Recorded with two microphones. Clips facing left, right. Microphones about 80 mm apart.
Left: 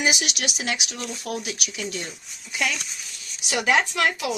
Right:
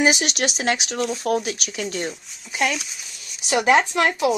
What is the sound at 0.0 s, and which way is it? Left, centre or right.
Speech, right.